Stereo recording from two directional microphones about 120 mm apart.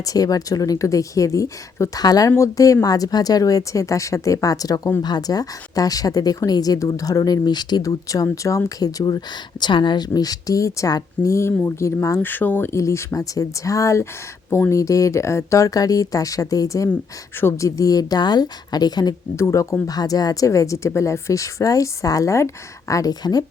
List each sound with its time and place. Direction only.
0.0 s a woman's voice: 30° left (ahead or behind)